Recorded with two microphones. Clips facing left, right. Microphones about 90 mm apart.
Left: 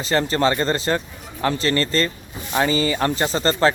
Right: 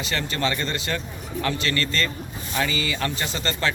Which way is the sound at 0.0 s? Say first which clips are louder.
Left 7 dB; 35° left (ahead or behind).